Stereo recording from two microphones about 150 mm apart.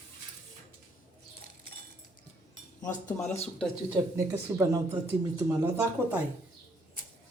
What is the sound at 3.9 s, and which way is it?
Speech, 20° right (ahead or behind).